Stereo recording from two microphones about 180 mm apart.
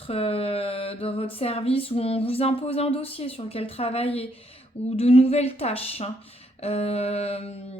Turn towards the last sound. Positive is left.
turn(degrees=35)  # may be behind; listen again after turning